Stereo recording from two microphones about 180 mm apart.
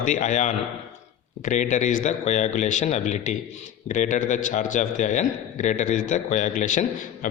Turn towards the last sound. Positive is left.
turn(degrees=45)  # may be behind; listen again after turning